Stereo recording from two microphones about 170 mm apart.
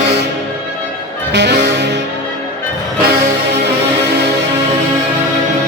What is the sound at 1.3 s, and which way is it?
Music, 85° right.